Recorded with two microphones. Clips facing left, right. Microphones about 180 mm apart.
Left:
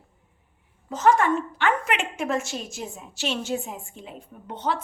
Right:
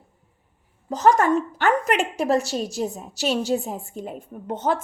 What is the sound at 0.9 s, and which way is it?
A woman's voice, 40° right (ahead or behind).